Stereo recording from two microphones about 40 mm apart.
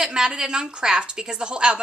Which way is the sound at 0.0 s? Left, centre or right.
Centre.